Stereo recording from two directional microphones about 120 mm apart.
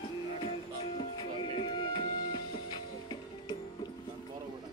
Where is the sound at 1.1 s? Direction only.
40° left (ahead or behind).